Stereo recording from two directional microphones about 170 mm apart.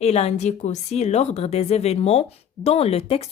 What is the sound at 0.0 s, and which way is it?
A woman's voice, 40° left (ahead or behind).